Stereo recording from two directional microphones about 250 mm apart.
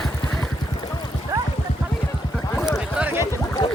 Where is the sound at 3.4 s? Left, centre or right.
Centre.